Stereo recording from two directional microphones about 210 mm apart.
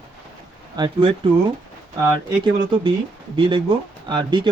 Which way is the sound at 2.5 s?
25° right (ahead or behind).